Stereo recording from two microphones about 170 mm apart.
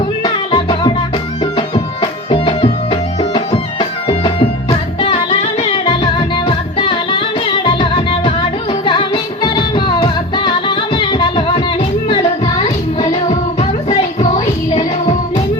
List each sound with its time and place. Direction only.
0.2 s music: 30° left (ahead or behind)
13.6 s music: 40° left (ahead or behind)